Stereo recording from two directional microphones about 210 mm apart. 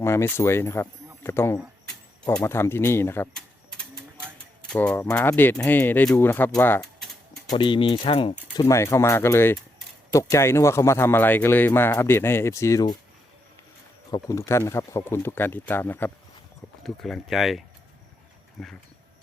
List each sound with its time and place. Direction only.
0.0 s speech: 10° left (ahead or behind)
7.5 s speech: 25° left (ahead or behind)
8.5 s a man's voice: 15° left (ahead or behind)
14.1 s a man's voice: 15° left (ahead or behind); by 17.6 s centre (ahead or behind)
18.6 s speech: centre (ahead or behind)